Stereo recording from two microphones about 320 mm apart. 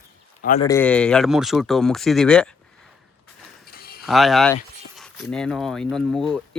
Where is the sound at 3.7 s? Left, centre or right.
Left.